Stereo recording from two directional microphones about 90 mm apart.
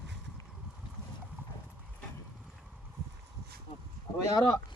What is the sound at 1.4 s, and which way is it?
Clip-clop, 20° right (ahead or behind).